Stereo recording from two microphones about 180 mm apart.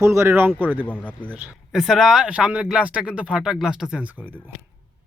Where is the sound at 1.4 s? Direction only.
5° right (ahead or behind).